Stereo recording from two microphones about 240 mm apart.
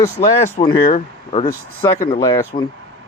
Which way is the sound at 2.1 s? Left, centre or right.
Centre.